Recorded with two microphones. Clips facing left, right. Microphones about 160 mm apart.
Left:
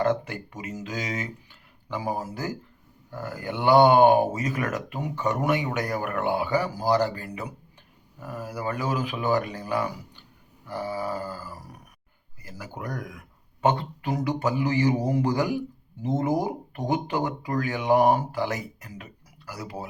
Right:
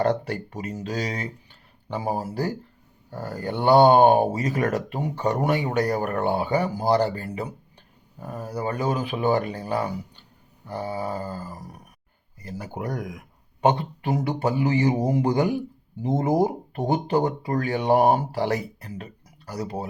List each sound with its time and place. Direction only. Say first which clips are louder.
0.0 s speech: right 2 dB; 35° right (ahead or behind)